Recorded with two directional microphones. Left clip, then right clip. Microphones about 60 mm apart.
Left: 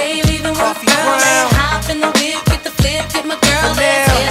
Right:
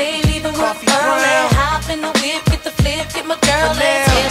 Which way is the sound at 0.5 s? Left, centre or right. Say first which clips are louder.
Left 1 dB; right.